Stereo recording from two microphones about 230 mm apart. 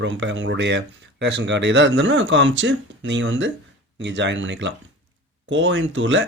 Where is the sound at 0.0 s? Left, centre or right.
Right.